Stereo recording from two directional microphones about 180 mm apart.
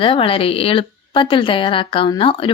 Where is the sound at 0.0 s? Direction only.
30° left (ahead or behind).